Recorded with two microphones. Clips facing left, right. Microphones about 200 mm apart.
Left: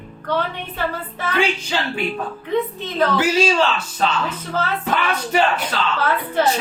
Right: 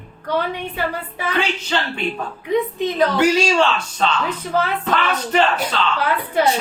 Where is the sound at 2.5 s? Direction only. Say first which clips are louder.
Right 3 dB; 15° right (ahead or behind).